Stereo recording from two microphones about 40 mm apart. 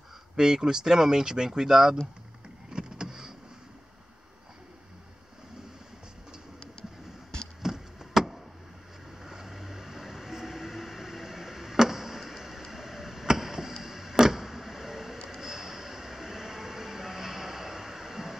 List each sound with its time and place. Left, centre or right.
0.4 s speech: centre
2.7 s vehicle: centre
7.6 s a sound: centre
9.2 s vehicle: centre
13.8 s a sound: centre
15.2 s train: centre